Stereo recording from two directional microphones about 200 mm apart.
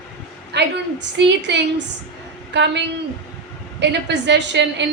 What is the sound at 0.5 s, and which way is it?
A woman's voice, 60° right (ahead or behind).